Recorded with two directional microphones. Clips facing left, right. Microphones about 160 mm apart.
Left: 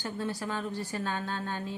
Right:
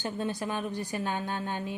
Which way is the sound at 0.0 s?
20° right (ahead or behind).